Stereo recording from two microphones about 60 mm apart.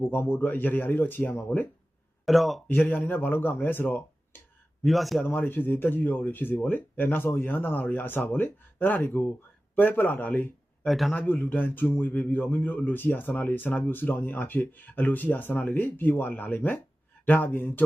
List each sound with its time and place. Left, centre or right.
0.1 s a man's voice: left
2.2 s speech: centre
2.6 s a man's voice: left
4.9 s speech: centre
5.2 s a man's voice: left
10.8 s speech: centre
11.1 s a man's voice: left